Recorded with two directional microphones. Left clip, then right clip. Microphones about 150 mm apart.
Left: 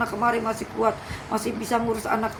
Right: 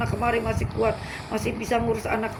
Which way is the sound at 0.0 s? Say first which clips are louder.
Left 2 dB; 30° left (ahead or behind).